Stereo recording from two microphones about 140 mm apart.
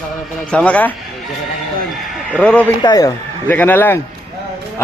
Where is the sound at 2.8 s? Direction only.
25° left (ahead or behind).